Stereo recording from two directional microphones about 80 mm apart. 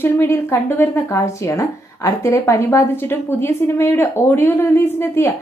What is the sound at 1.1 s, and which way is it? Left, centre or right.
A woman's voice, left.